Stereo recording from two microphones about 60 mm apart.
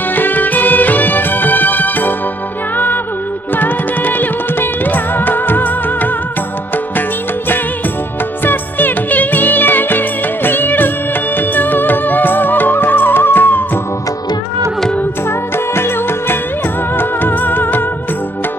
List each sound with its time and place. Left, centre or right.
0.1 s music: left
3.5 s music: left
8.5 s music: left
15.5 s music: left